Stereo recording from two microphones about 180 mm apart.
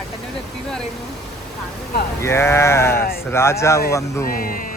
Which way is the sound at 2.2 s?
15° left (ahead or behind).